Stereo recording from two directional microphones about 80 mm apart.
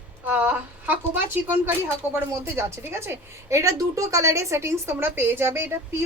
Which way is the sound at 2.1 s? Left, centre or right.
Right.